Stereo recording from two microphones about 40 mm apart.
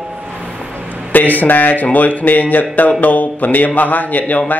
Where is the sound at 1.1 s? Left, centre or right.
Left.